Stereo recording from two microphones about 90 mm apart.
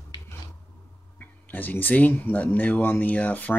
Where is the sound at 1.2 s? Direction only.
20° left (ahead or behind).